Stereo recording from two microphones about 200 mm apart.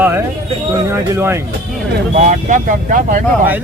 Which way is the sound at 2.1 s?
40° right (ahead or behind).